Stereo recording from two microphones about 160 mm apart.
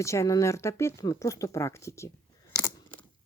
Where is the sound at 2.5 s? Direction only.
15° left (ahead or behind).